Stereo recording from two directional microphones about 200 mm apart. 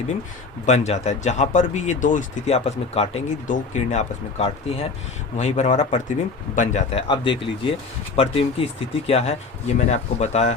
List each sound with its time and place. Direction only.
0.6 s speech: 35° left (ahead or behind)